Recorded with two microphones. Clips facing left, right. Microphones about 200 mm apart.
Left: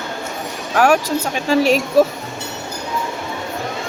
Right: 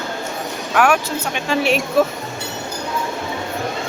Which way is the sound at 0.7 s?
35° left (ahead or behind).